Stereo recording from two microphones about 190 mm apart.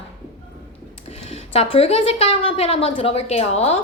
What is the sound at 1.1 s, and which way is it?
A woman's voice, 35° left (ahead or behind).